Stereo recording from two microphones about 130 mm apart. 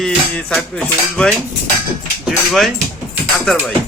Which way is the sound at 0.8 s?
10° left (ahead or behind).